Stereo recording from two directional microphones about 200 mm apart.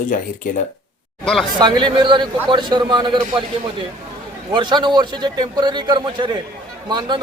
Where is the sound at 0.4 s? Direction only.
40° left (ahead or behind).